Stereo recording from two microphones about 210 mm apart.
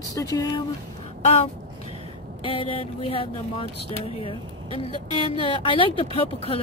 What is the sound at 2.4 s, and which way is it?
Speech, 25° left (ahead or behind).